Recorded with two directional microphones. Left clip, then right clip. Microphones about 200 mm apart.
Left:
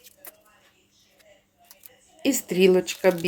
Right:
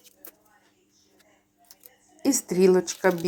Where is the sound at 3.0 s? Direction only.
5° left (ahead or behind).